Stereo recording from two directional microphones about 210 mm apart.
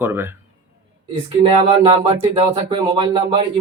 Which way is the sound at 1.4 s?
30° right (ahead or behind).